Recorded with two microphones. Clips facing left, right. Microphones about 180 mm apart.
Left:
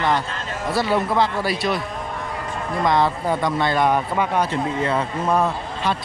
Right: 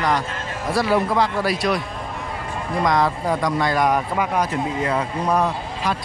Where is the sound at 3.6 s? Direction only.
25° left (ahead or behind).